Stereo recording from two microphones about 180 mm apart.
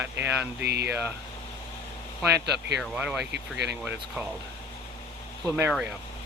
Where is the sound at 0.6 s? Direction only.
65° right (ahead or behind).